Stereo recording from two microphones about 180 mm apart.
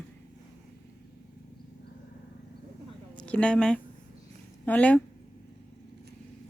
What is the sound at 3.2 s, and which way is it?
A woman's voice, 5° left (ahead or behind).